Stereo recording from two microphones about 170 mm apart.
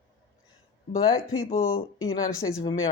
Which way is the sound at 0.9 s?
30° left (ahead or behind).